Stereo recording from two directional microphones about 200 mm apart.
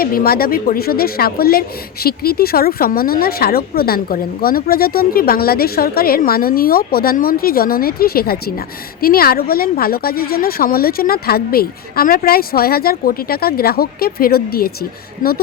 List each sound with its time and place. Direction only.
0.0 s speech: 50° left (ahead or behind)